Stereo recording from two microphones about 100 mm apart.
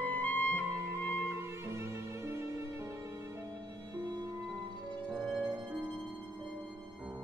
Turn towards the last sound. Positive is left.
turn(degrees=-10)  # may be behind; listen again after turning